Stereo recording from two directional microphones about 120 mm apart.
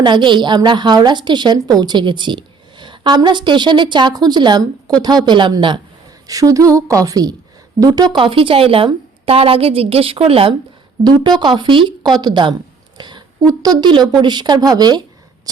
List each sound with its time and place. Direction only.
0.0 s a woman's voice: 40° right (ahead or behind)
6.2 s a woman's voice: 30° right (ahead or behind); by 10.5 s 50° right (ahead or behind)
11.0 s a woman's voice: 35° right (ahead or behind)